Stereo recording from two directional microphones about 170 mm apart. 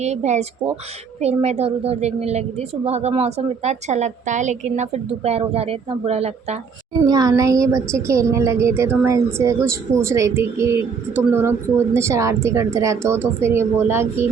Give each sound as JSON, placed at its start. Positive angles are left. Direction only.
{"t": 0.0, "sound": "a woman's voice", "side_deg": -40}
{"t": 7.1, "sound": "a woman's voice", "side_deg": -20}